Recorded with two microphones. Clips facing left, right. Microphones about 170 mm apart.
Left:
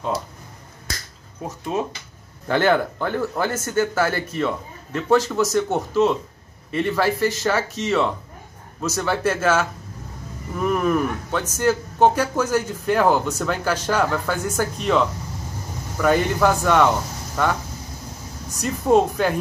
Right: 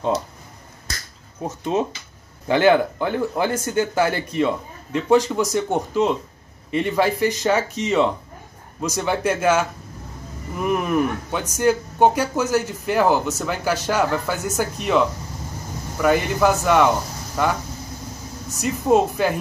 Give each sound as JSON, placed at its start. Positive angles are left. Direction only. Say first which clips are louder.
{"t": 1.4, "sound": "speech", "louder": "right 3 dB", "side_deg": -25}
{"t": 2.4, "sound": "speech", "louder": "right 3 dB", "side_deg": -15}
{"t": 18.6, "sound": "speech", "louder": "even", "side_deg": -5}